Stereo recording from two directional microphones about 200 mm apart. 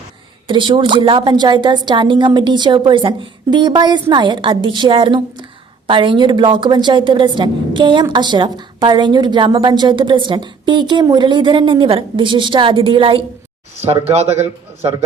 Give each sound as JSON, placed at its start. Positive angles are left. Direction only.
{"t": 0.4, "sound": "a woman's voice", "side_deg": -25}